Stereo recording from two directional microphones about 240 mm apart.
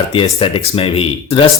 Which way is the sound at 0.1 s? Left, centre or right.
Left.